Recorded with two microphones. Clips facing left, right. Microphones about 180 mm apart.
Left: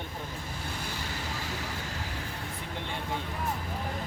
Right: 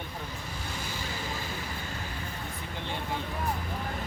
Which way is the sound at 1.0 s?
75° left (ahead or behind).